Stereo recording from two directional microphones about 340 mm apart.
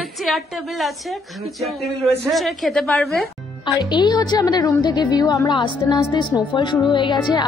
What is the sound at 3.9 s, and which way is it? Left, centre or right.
A woman's voice, centre.